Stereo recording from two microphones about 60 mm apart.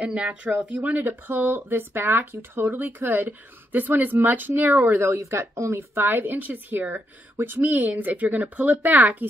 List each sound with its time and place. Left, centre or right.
0.0 s speech: centre
5.0 s a woman's voice: right
5.8 s speech: right
7.6 s speech: right